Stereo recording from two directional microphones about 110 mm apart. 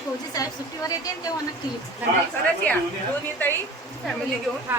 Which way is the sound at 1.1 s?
35° left (ahead or behind).